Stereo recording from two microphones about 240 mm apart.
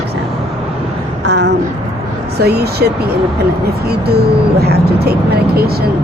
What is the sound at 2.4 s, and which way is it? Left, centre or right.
Speech, right.